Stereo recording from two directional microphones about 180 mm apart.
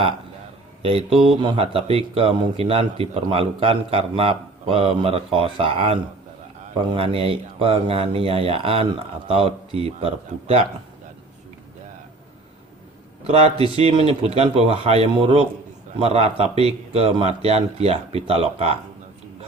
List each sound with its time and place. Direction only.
0.8 s speech: 30° right (ahead or behind)
13.2 s speech: 35° right (ahead or behind)